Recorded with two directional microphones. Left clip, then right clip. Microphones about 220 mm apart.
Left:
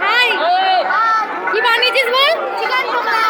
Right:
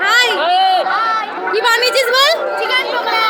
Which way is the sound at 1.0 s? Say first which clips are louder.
Left 2 dB; 10° right (ahead or behind).